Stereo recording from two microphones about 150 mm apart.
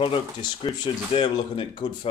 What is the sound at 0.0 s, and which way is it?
Speech, 35° left (ahead or behind).